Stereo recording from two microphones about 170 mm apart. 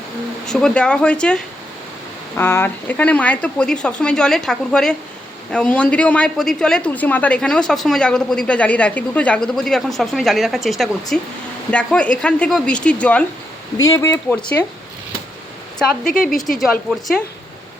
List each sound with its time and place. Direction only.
0.4 s a woman's voice: 5° left (ahead or behind)
13.7 s speech: 20° left (ahead or behind)
16.3 s a woman's voice: centre (ahead or behind)